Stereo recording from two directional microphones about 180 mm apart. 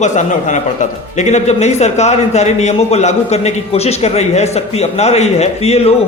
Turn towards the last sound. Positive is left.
turn(degrees=35)  # may be behind; listen again after turning